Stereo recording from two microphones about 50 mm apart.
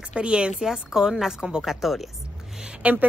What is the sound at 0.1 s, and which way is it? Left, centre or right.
A woman's voice, right.